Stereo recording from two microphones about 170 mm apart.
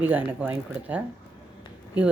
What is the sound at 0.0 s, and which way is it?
Speech, 10° right (ahead or behind).